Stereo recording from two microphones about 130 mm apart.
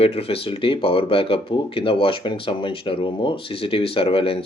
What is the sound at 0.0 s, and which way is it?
Speech, 50° left (ahead or behind).